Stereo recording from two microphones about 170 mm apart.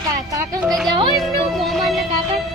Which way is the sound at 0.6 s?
Centre (ahead or behind).